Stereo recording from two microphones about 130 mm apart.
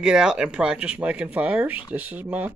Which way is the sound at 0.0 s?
5° right (ahead or behind).